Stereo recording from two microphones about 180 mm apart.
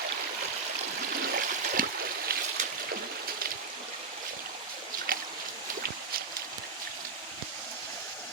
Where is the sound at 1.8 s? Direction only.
50° right (ahead or behind).